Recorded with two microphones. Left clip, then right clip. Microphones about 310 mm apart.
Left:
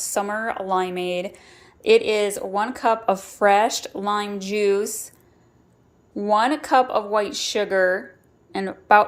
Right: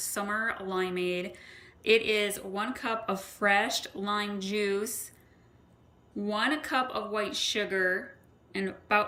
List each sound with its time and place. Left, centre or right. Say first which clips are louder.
0.0 s a sound: left 9 dB; centre
0.4 s speech: left 8 dB; centre
6.1 s speech: left 10 dB; centre